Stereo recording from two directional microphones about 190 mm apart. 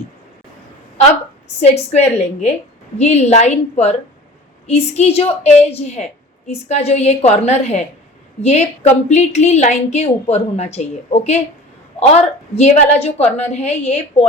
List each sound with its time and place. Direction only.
1.9 s a woman's voice: 35° left (ahead or behind)